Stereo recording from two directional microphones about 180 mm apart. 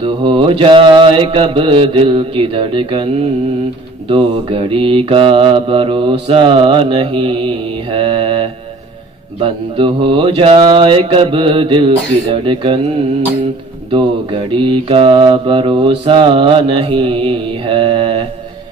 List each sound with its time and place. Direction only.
0.0 s mantra: 30° right (ahead or behind)
13.9 s mantra: 30° right (ahead or behind)